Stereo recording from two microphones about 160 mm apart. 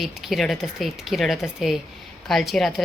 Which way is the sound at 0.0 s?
Centre (ahead or behind).